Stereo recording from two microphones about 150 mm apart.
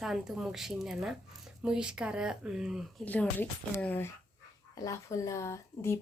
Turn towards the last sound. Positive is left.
turn(degrees=20)  # may be behind; listen again after turning